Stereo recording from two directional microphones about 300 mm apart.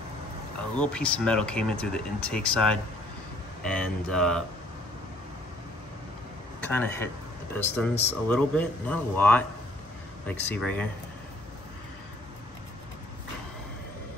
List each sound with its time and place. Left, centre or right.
0.7 s speech: centre
6.6 s speech: centre